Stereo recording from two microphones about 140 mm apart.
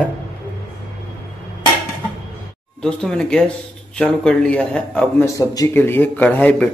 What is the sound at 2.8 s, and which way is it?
A man's voice, 5° left (ahead or behind).